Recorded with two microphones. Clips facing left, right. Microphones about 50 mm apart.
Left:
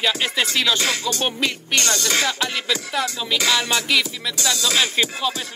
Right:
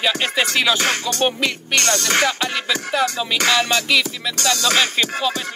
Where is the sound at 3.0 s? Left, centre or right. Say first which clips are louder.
Right 2 dB; right.